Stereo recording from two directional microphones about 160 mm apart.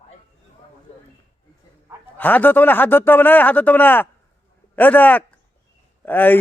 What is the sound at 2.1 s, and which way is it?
A man's voice, 10° left (ahead or behind).